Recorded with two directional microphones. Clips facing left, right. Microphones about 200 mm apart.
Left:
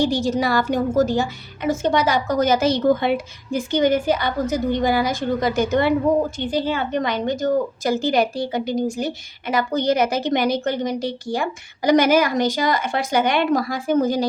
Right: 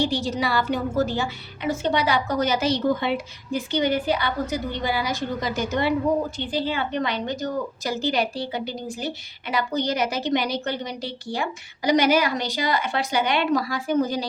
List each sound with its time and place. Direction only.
0.0 s a woman's voice: 45° left (ahead or behind)